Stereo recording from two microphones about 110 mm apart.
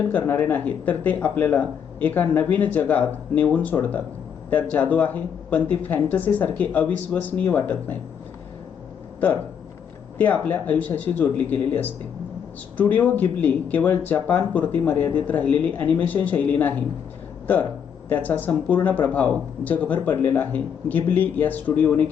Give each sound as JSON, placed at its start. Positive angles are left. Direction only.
{"t": 0.1, "sound": "speech", "side_deg": 15}
{"t": 9.2, "sound": "speech", "side_deg": 15}